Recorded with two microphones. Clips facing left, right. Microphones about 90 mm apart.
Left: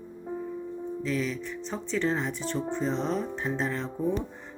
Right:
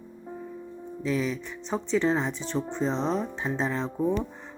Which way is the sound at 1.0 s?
10° right (ahead or behind).